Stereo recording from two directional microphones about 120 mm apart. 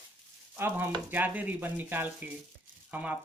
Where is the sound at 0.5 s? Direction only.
20° right (ahead or behind).